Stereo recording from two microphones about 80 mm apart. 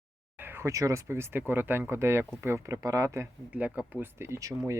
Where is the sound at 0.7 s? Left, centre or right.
Right.